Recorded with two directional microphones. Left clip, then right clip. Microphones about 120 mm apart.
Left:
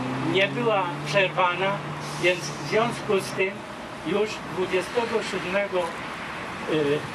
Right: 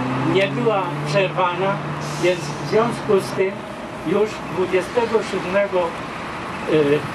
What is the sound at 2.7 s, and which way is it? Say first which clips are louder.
Speech: right 6 dB; 20° left (ahead or behind).